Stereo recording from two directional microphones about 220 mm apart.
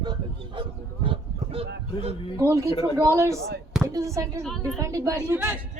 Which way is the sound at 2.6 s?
15° left (ahead or behind).